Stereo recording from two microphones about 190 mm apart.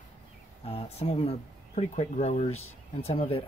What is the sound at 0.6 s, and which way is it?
Speech, 30° left (ahead or behind).